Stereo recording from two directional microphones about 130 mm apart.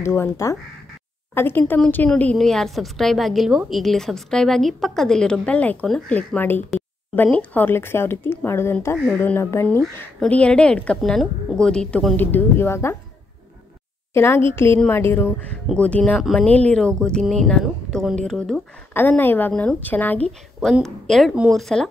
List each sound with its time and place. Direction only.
0.0 s a woman's voice: 20° left (ahead or behind)
8.9 s a woman's voice: 5° right (ahead or behind)
9.2 s speech: 20° left (ahead or behind)
10.2 s a woman's voice: 10° left (ahead or behind)
12.2 s speech: 15° left (ahead or behind)
14.1 s speech: 20° left (ahead or behind)
15.7 s a woman's voice: 10° left (ahead or behind)
18.9 s speech: 15° left (ahead or behind)
20.2 s a woman's voice: centre (ahead or behind)